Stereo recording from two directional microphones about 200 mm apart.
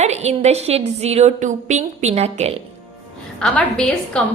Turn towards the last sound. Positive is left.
turn(degrees=5)  # may be behind; listen again after turning